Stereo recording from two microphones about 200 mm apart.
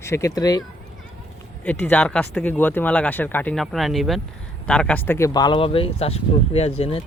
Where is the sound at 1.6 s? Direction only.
10° left (ahead or behind); by 7.0 s 30° left (ahead or behind).